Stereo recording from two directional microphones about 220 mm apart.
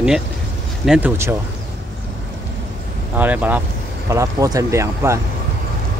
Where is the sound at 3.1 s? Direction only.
10° right (ahead or behind).